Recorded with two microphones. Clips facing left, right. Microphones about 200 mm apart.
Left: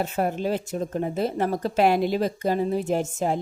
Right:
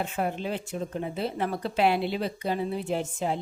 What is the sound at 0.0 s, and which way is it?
A woman's voice, 40° left (ahead or behind).